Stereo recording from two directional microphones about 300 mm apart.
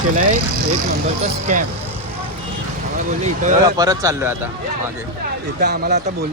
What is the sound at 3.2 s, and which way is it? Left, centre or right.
Speech, right.